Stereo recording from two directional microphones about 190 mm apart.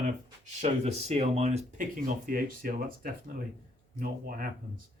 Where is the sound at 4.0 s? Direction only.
50° right (ahead or behind).